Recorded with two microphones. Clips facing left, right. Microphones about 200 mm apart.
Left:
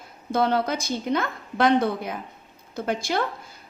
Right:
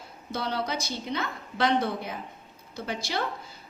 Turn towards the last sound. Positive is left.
turn(degrees=50)  # may be behind; listen again after turning